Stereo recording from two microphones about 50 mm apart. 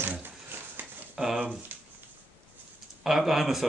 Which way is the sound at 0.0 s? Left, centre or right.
Right.